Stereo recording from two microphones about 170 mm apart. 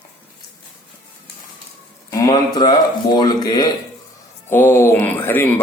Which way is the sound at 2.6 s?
25° left (ahead or behind).